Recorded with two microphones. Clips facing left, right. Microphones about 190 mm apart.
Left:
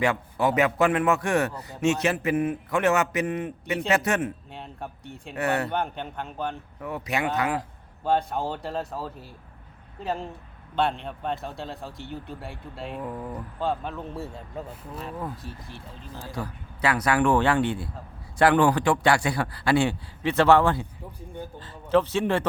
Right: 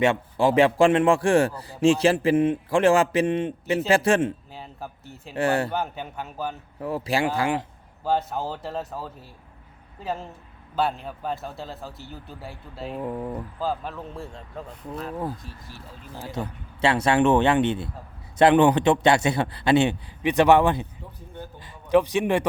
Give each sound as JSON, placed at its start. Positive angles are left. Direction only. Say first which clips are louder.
{"t": 0.0, "sound": "a man's voice", "louder": "right 3 dB", "side_deg": -25}
{"t": 4.5, "sound": "a man's voice", "louder": "even", "side_deg": -5}
{"t": 5.3, "sound": "a man's voice", "louder": "right 3 dB", "side_deg": -30}
{"t": 5.7, "sound": "a man's voice", "louder": "even", "side_deg": -5}
{"t": 6.7, "sound": "a man's voice", "louder": "right 6 dB", "side_deg": -30}
{"t": 8.0, "sound": "a man's voice", "louder": "even", "side_deg": 0}
{"t": 13.0, "sound": "a man's voice", "louder": "right 6 dB", "side_deg": -25}
{"t": 13.6, "sound": "a man's voice", "louder": "left 2 dB", "side_deg": 0}
{"t": 16.2, "sound": "a man's voice", "louder": "right 3 dB", "side_deg": -20}